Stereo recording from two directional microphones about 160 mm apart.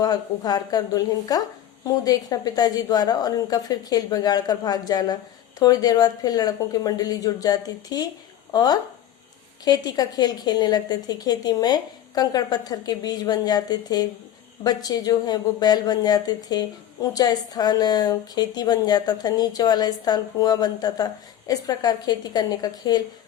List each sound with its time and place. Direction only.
0.0 s speech: 25° left (ahead or behind)